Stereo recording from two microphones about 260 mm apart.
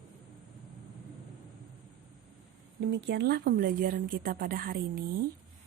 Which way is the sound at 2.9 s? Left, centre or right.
Right.